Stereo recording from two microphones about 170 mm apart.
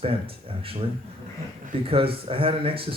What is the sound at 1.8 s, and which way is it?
Speech, 35° right (ahead or behind).